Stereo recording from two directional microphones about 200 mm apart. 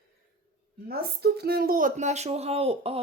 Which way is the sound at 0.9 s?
55° right (ahead or behind).